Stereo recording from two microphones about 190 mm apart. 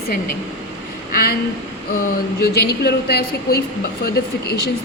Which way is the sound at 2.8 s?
60° left (ahead or behind).